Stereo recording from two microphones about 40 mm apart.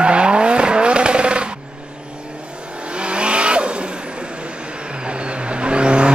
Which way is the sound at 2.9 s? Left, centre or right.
Right.